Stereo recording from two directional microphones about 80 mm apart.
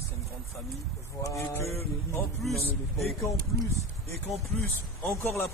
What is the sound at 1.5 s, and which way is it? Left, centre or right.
Speech, left.